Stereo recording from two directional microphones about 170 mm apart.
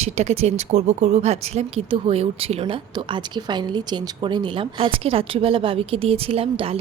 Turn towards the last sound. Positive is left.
turn(degrees=-35)  # may be behind; listen again after turning